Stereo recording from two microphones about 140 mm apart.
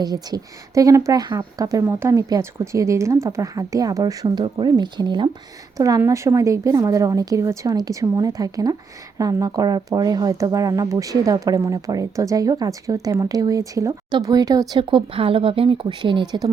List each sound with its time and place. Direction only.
0.0 s speech: 30° right (ahead or behind)
5.7 s speech: 25° right (ahead or behind)